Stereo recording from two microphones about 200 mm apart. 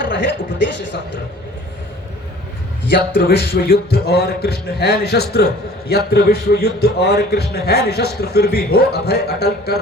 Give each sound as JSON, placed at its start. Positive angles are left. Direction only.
{"t": 0.1, "sound": "speech", "side_deg": 60}
{"t": 3.2, "sound": "a man's voice", "side_deg": 50}